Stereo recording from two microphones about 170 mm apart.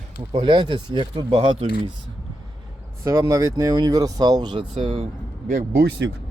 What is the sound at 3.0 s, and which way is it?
Speech, 20° right (ahead or behind).